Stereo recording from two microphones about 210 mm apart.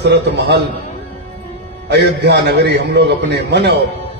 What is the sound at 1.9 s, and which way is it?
A man's voice, 55° right (ahead or behind).